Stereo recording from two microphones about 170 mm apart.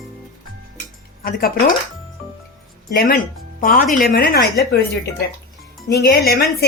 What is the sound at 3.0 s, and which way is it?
Speech, 55° left (ahead or behind).